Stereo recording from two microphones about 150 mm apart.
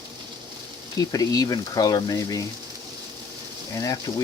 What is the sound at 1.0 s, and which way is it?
Speech, 25° left (ahead or behind).